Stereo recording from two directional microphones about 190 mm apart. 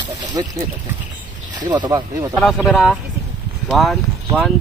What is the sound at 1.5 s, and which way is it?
Speech, 20° right (ahead or behind).